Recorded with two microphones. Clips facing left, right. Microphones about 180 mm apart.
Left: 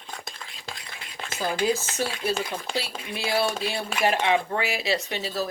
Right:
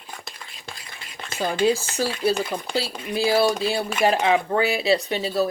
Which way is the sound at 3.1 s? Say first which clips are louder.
Right 6 dB; 35° right (ahead or behind).